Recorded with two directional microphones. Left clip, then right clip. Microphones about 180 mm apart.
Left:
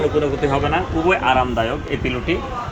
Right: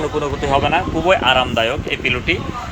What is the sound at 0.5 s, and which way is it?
Speech, 20° right (ahead or behind).